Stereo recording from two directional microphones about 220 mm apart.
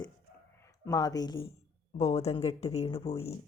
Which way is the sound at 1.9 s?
30° left (ahead or behind).